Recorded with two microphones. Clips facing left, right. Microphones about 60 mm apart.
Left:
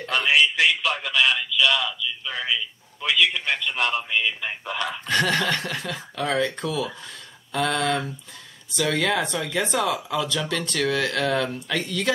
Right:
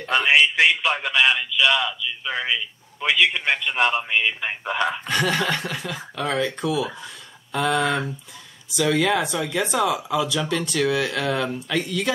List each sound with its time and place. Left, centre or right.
0.1 s a man's voice: right
5.0 s speech: centre